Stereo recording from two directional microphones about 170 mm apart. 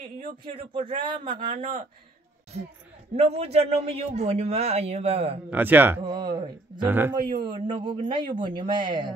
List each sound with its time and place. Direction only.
0.2 s speech: 30° right (ahead or behind)
1.5 s speech: 50° right (ahead or behind)
3.2 s a man's voice: 40° right (ahead or behind)
5.5 s speech: 10° right (ahead or behind)
6.0 s speech: 25° right (ahead or behind)
6.9 s speech: 10° right (ahead or behind)
7.4 s speech: 25° right (ahead or behind)